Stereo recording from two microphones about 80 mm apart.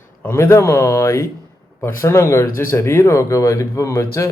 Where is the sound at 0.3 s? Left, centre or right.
Left.